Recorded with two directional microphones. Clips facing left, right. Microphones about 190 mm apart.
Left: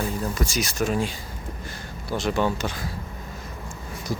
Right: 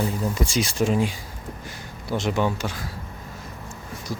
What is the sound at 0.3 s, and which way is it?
Speech, 30° right (ahead or behind).